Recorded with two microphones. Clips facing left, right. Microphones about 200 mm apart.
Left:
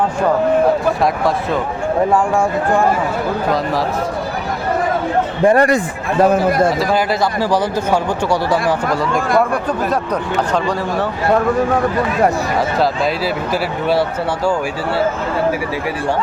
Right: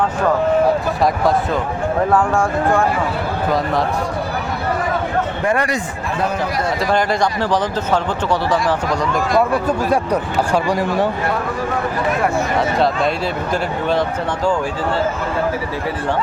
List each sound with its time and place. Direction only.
2.1 s speech: 15° left (ahead or behind)
5.5 s a man's voice: 45° left (ahead or behind)
6.7 s speech: 5° left (ahead or behind)
8.9 s speech: 55° left (ahead or behind)
9.9 s speech: 10° right (ahead or behind)
12.5 s speech: centre (ahead or behind)